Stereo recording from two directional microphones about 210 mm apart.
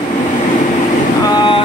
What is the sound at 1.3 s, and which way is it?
Speech, 20° left (ahead or behind).